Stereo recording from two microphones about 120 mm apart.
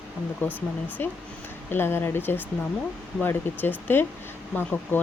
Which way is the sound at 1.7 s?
20° left (ahead or behind).